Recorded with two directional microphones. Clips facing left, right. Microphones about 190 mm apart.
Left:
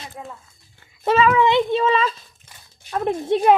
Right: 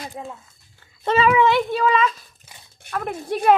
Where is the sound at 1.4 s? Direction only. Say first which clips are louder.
Left 1 dB; 20° left (ahead or behind).